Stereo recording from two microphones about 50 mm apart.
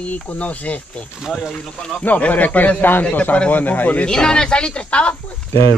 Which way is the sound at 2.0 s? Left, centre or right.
Left.